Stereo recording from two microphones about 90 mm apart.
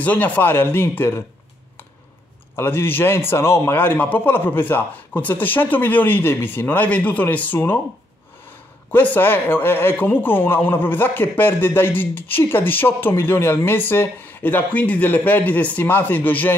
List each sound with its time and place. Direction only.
0.0 s a man's voice: 15° left (ahead or behind)
2.5 s a man's voice: 25° left (ahead or behind)
8.9 s a man's voice: 20° left (ahead or behind)